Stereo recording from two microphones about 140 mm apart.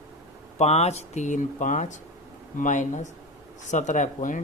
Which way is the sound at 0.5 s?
50° left (ahead or behind).